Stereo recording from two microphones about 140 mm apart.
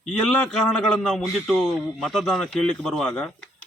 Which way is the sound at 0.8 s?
Centre (ahead or behind).